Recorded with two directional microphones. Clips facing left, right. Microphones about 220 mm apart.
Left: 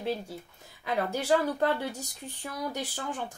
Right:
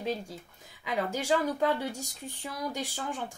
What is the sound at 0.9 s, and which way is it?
Speech, 15° right (ahead or behind).